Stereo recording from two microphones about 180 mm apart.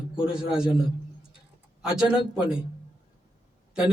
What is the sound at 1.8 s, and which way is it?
Speech, 5° right (ahead or behind).